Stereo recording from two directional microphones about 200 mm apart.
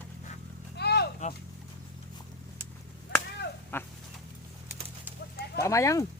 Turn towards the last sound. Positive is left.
turn(degrees=15)  # may be behind; listen again after turning